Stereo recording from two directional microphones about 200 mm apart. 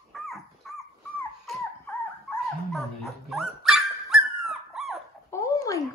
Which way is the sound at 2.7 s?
Centre (ahead or behind).